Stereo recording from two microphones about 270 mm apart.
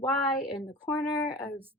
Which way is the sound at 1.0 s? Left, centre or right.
Centre.